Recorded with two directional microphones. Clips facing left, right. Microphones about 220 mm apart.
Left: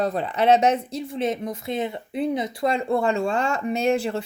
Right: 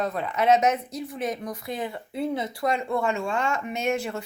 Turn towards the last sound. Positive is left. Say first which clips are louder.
# left 5 dB
turn(degrees=30)  # may be behind; listen again after turning